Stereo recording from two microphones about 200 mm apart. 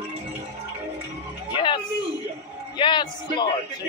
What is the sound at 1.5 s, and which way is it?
A man's voice, 25° left (ahead or behind).